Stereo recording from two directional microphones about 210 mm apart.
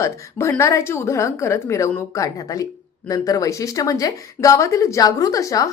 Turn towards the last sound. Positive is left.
turn(degrees=15)  # may be behind; listen again after turning